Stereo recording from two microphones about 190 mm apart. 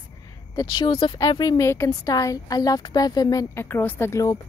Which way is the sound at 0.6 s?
25° left (ahead or behind).